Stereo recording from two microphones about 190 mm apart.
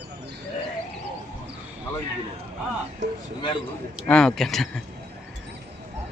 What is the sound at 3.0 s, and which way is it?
Speech, 65° right (ahead or behind).